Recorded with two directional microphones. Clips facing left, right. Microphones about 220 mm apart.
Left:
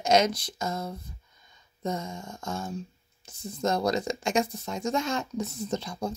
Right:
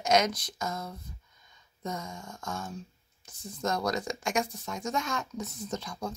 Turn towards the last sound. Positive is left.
turn(degrees=30)  # may be behind; listen again after turning